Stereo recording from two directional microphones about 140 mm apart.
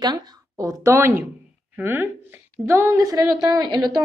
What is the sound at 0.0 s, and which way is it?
A woman's voice, 30° right (ahead or behind).